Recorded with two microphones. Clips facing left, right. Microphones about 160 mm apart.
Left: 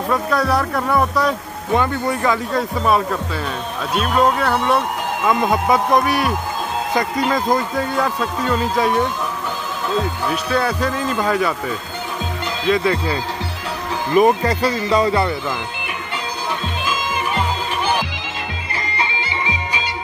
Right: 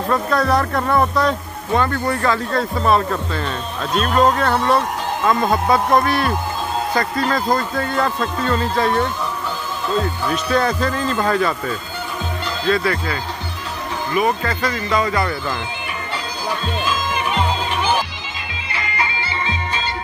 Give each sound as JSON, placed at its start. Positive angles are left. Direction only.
{"t": 0.1, "sound": "speech", "side_deg": 10}
{"t": 14.1, "sound": "speech", "side_deg": 40}
{"t": 16.8, "sound": "music", "side_deg": 5}
{"t": 18.8, "sound": "music", "side_deg": 30}